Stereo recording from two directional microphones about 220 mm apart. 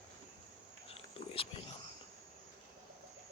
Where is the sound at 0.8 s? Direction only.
25° left (ahead or behind).